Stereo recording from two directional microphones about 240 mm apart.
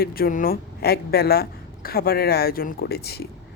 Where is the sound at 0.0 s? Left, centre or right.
Left.